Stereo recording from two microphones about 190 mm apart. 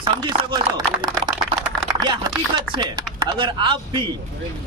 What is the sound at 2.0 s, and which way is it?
A man's voice, 20° right (ahead or behind).